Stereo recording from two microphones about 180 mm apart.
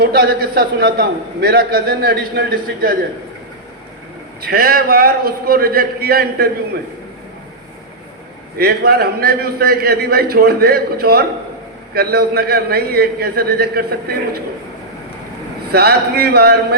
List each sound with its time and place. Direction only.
0.0 s a man's voice: 60° right (ahead or behind)
4.4 s a man's voice: 60° right (ahead or behind)
8.5 s a man's voice: 60° right (ahead or behind)
15.7 s a man's voice: 60° right (ahead or behind)